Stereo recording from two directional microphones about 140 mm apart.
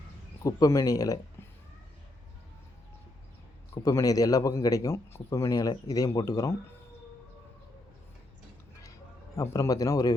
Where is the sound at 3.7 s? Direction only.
20° left (ahead or behind).